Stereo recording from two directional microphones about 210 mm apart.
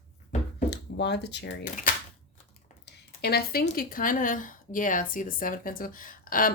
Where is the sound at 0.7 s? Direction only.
55° left (ahead or behind).